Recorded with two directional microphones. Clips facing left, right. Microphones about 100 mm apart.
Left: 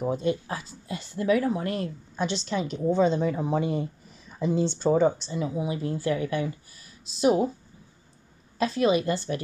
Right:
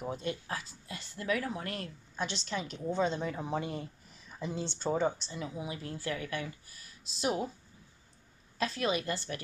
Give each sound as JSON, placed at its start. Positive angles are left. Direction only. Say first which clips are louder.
{"t": 0.2, "sound": "speech", "louder": "left 9 dB", "side_deg": 15}
{"t": 8.5, "sound": "speech", "louder": "left 9 dB", "side_deg": 15}